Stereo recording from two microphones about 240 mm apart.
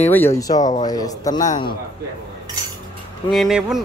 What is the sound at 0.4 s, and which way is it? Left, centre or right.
Speech, centre.